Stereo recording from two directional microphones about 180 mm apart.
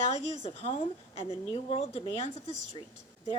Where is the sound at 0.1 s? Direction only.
35° left (ahead or behind).